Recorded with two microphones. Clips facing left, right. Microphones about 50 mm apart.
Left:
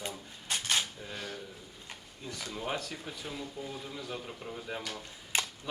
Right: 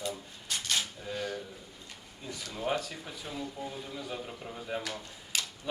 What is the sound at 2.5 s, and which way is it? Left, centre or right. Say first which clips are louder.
A man's voice: right 4 dB; centre.